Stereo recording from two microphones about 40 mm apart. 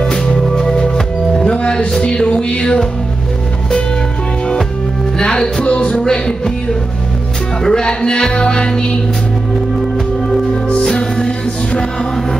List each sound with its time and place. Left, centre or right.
0.4 s music: centre
1.4 s music: left
5.2 s music: centre
11.0 s music: centre